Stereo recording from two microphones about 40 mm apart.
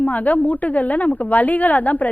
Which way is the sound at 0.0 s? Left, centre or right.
Left.